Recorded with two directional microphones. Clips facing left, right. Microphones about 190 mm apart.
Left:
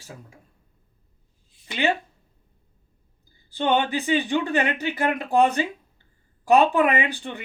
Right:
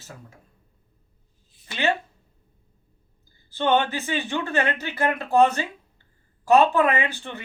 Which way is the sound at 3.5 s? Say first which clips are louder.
Even; 15° left (ahead or behind).